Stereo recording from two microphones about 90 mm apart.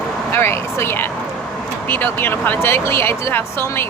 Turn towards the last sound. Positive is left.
turn(degrees=25)  # may be behind; listen again after turning